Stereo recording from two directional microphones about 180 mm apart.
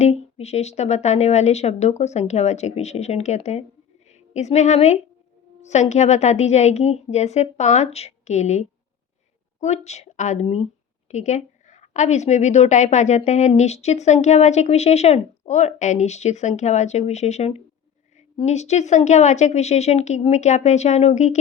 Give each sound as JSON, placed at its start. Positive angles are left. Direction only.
{"t": 0.0, "sound": "a woman's voice", "side_deg": 35}